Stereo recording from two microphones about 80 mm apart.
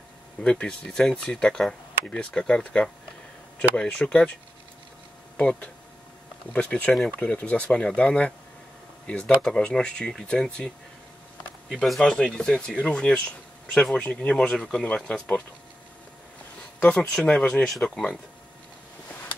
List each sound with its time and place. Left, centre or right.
0.4 s speech: centre
5.4 s speech: centre
11.8 s speech: centre
16.8 s speech: centre